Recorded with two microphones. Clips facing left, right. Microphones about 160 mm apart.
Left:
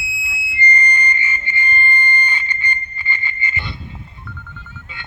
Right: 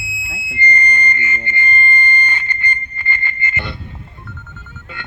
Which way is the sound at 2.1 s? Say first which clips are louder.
Right 1 dB; 55° right (ahead or behind).